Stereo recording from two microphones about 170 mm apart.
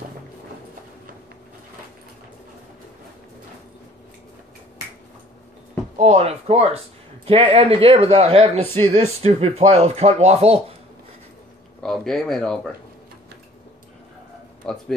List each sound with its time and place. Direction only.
5.9 s a man's voice: 40° right (ahead or behind)
11.8 s speech: centre (ahead or behind)
14.7 s speech: 5° left (ahead or behind)